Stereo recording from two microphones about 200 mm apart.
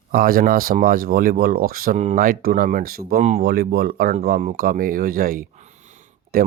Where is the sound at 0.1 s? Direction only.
45° right (ahead or behind).